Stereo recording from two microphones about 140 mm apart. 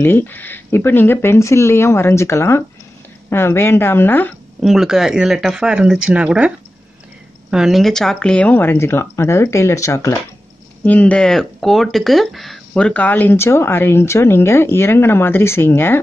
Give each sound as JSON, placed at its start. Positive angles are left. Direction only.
{"t": 0.0, "sound": "speech", "side_deg": 15}
{"t": 4.6, "sound": "speech", "side_deg": 0}
{"t": 7.5, "sound": "speech", "side_deg": 0}